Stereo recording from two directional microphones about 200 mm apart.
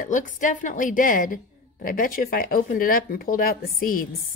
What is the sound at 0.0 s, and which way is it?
A woman's voice, 40° left (ahead or behind).